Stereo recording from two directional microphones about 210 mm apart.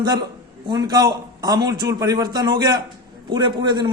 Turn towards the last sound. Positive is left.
turn(degrees=-20)  # may be behind; listen again after turning